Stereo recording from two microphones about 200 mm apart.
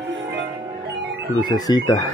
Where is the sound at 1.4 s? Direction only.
20° left (ahead or behind).